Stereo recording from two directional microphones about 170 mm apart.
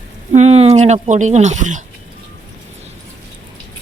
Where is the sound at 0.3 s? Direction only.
40° right (ahead or behind).